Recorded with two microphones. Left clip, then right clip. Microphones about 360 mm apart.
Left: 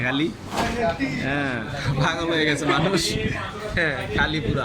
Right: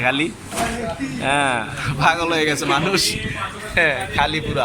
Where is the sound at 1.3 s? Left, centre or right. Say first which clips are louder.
Right 7 dB; centre.